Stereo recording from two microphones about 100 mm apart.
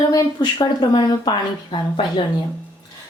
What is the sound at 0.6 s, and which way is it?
Speech, 50° left (ahead or behind).